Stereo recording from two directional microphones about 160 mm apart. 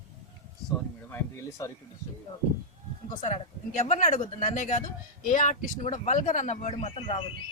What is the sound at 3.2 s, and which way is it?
Speech, 50° left (ahead or behind).